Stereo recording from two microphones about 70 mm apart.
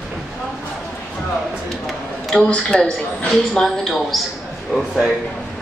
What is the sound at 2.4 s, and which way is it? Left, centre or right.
Speech, centre.